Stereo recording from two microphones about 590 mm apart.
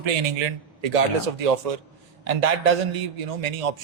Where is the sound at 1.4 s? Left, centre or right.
Right.